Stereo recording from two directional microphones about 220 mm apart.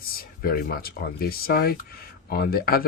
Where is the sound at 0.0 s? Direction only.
40° left (ahead or behind).